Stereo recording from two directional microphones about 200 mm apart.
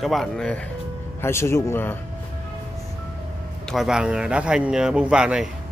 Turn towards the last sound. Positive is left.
turn(degrees=-5)  # may be behind; listen again after turning